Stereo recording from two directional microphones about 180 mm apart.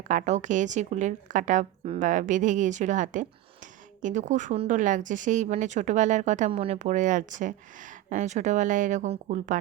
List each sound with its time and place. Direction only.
0.0 s speech: 45° right (ahead or behind)